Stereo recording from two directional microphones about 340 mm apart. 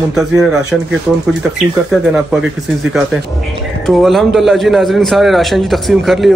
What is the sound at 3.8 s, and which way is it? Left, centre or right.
A man's voice, centre.